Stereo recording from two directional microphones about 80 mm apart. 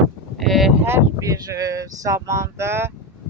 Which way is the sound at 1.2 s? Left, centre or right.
Right.